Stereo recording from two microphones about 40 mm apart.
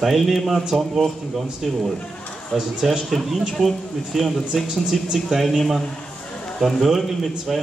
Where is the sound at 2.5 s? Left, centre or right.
Centre.